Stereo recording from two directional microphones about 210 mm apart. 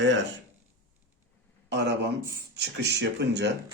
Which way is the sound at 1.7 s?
55° right (ahead or behind).